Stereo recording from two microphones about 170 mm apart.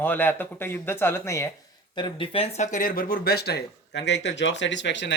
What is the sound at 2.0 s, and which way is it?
Speech, 30° left (ahead or behind).